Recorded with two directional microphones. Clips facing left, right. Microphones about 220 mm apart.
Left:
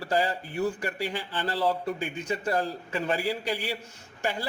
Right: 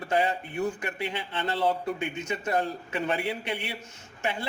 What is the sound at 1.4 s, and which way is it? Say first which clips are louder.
Speech: right 1 dB; 25° right (ahead or behind).